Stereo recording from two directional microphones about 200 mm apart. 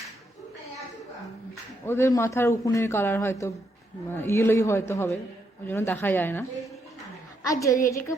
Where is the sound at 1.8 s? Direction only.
15° left (ahead or behind).